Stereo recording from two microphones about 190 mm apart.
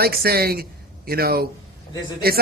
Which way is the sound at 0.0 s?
55° right (ahead or behind).